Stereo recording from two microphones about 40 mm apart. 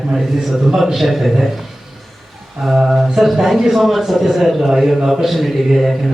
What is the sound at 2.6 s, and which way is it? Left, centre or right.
A man's voice, centre.